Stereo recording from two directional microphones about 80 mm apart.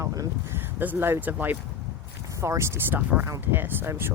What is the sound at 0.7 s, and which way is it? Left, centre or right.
Speech, right.